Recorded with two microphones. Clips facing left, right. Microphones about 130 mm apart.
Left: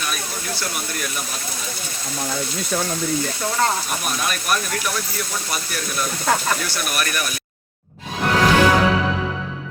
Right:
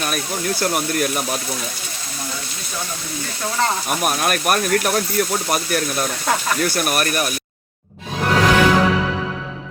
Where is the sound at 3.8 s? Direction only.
55° right (ahead or behind).